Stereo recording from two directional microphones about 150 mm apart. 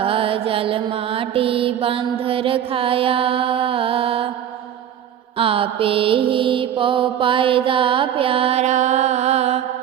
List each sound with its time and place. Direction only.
0.0 s music: 40° right (ahead or behind)
5.4 s mantra: 40° right (ahead or behind)